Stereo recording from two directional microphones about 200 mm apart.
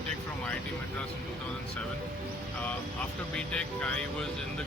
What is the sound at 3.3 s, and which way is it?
Speech, 5° left (ahead or behind).